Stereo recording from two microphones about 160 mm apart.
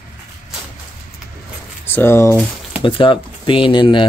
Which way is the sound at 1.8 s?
15° left (ahead or behind).